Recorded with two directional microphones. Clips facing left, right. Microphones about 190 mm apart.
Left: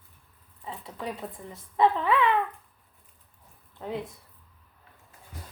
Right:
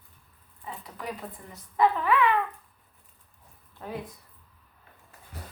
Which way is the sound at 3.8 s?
20° left (ahead or behind).